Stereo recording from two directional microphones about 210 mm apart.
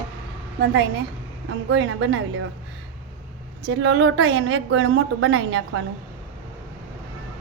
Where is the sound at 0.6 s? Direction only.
50° right (ahead or behind).